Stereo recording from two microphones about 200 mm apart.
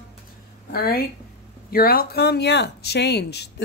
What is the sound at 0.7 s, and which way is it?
Speech, 50° left (ahead or behind).